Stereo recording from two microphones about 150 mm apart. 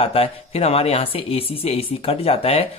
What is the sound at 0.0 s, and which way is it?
Speech, 40° left (ahead or behind).